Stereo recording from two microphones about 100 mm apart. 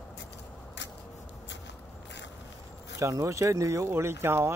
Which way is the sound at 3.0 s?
30° right (ahead or behind).